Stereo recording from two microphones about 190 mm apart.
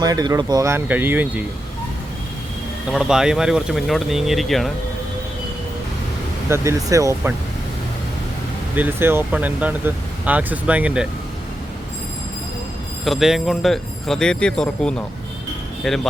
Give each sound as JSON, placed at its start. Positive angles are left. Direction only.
{"t": 0.0, "sound": "speech", "side_deg": -20}
{"t": 2.9, "sound": "speech", "side_deg": -5}
{"t": 6.5, "sound": "speech", "side_deg": -15}
{"t": 8.7, "sound": "speech", "side_deg": -10}
{"t": 13.1, "sound": "speech", "side_deg": 0}